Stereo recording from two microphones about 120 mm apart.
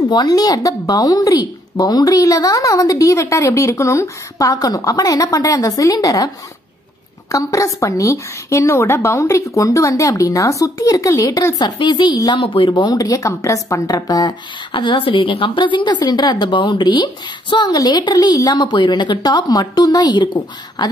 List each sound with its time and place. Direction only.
0.1 s speech: 35° left (ahead or behind)
14.7 s a woman's voice: 45° left (ahead or behind)